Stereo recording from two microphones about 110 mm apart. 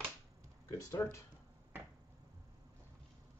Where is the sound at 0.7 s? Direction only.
25° left (ahead or behind).